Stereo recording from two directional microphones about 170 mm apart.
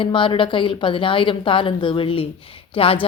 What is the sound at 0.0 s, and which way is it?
A woman's voice, 30° left (ahead or behind).